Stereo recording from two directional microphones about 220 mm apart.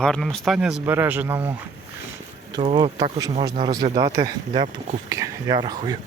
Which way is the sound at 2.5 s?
20° right (ahead or behind).